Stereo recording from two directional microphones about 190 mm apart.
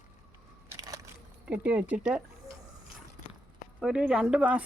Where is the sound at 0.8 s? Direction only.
20° right (ahead or behind).